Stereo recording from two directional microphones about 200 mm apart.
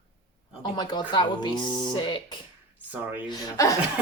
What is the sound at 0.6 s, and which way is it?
Speech, 20° left (ahead or behind).